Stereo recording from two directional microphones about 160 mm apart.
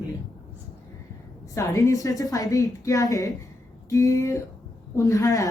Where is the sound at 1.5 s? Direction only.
20° left (ahead or behind).